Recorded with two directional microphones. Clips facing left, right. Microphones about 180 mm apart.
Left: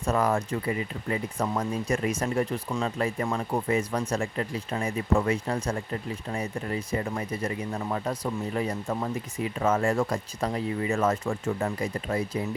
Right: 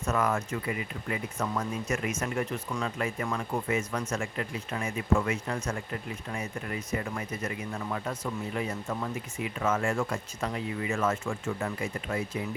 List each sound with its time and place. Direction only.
0.0 s speech: 35° left (ahead or behind)